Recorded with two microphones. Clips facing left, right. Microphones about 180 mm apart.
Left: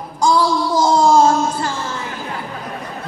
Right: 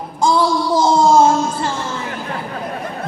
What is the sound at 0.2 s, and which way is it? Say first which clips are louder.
Child singing: even; 25° right (ahead or behind).